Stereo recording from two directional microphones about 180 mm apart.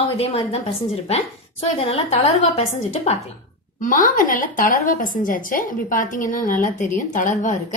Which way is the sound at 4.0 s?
50° left (ahead or behind).